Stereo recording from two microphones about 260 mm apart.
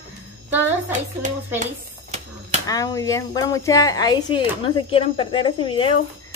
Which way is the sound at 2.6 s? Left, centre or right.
Centre.